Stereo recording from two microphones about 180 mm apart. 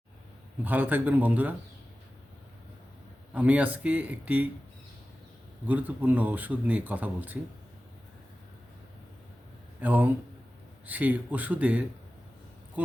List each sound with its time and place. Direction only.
0.6 s speech: 10° right (ahead or behind)
3.3 s speech: 10° right (ahead or behind)
5.6 s speech: 10° right (ahead or behind)
9.8 s speech: 10° right (ahead or behind)